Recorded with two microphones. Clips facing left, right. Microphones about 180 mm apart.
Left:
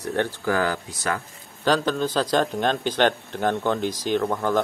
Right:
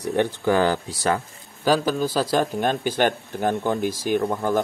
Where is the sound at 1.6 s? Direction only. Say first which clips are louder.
Right 1 dB; 5° right (ahead or behind).